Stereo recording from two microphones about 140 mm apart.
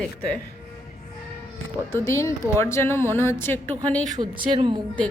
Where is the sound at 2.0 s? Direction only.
20° left (ahead or behind).